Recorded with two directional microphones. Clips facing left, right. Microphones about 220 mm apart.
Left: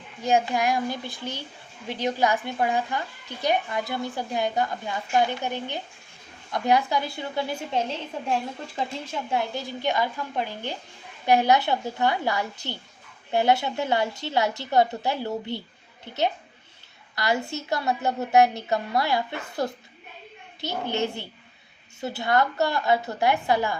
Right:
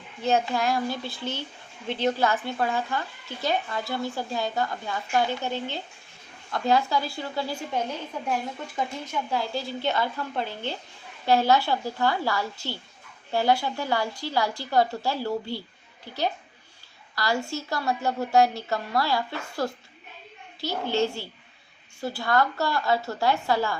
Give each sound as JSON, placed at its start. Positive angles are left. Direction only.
{"t": 0.2, "sound": "a woman's voice", "side_deg": 15}